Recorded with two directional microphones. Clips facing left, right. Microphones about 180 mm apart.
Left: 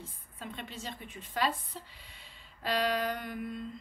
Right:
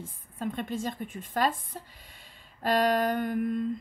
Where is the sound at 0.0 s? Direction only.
50° right (ahead or behind).